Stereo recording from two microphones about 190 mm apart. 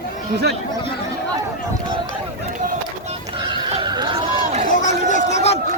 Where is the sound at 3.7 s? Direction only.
25° right (ahead or behind).